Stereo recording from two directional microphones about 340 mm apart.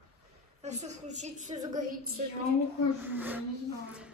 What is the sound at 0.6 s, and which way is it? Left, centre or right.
A woman's voice, centre.